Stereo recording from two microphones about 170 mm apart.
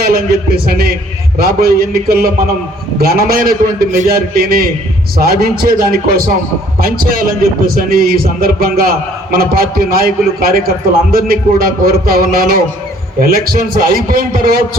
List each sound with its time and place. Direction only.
0.0 s a man's voice: 65° right (ahead or behind)